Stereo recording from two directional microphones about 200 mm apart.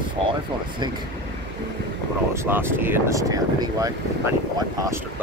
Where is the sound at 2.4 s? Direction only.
10° right (ahead or behind).